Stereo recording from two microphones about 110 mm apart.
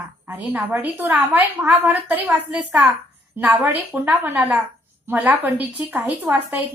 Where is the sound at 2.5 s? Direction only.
5° right (ahead or behind).